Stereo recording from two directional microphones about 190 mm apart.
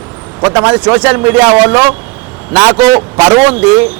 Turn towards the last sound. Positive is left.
turn(degrees=-5)  # may be behind; listen again after turning